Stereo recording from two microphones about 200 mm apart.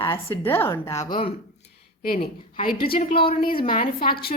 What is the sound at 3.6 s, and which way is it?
Speech, 45° left (ahead or behind).